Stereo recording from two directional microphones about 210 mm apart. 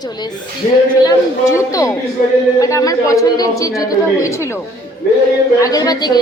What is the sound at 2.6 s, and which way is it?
A woman's voice, 15° left (ahead or behind).